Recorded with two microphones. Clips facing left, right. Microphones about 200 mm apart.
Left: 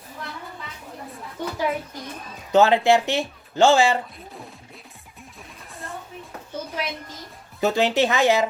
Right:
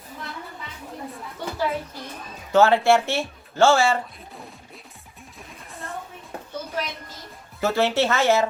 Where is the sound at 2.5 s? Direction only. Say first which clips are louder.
Even; 15° left (ahead or behind).